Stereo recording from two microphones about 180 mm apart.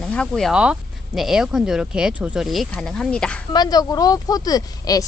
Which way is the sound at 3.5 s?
20° left (ahead or behind).